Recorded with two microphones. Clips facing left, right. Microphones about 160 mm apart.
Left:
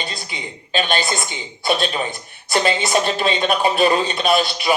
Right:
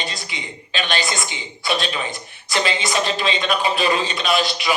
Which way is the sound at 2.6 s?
50° left (ahead or behind).